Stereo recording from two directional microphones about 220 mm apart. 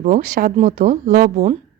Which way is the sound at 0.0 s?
35° right (ahead or behind).